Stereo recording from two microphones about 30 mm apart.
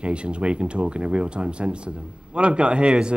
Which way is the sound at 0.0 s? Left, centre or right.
Right.